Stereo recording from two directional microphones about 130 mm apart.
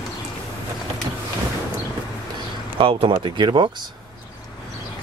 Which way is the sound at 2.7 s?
45° right (ahead or behind).